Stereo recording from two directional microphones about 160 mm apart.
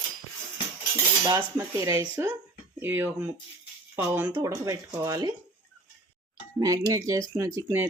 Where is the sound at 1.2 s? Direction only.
15° right (ahead or behind).